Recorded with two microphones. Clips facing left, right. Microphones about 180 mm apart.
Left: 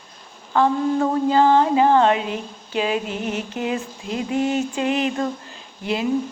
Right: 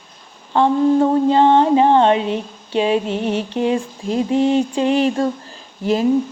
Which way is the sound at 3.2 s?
35° right (ahead or behind).